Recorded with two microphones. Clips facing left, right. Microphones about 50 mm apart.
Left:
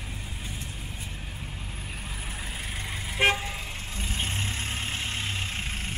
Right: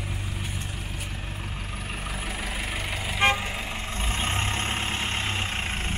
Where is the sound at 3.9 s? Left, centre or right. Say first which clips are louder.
Right 4 dB; right.